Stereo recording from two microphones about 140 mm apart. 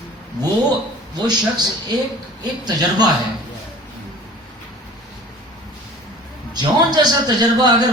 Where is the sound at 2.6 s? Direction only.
30° right (ahead or behind).